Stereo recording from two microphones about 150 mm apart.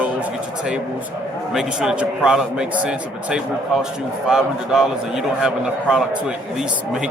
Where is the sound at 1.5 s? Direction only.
5° right (ahead or behind).